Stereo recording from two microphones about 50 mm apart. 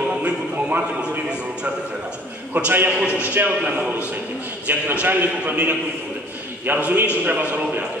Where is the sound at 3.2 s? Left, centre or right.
Right.